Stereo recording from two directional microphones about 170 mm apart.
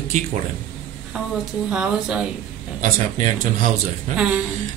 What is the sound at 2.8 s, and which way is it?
Speech, 45° right (ahead or behind).